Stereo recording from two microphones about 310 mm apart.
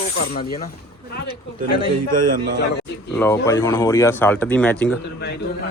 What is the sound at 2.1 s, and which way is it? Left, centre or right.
Speech, right.